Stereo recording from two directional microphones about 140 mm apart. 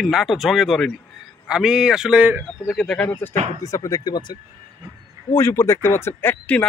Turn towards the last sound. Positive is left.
turn(degrees=10)  # may be behind; listen again after turning